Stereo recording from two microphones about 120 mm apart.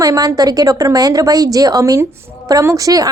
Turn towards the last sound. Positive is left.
turn(degrees=-30)  # may be behind; listen again after turning